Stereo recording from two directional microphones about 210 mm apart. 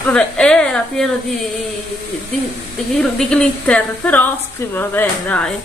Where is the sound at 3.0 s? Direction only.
5° left (ahead or behind).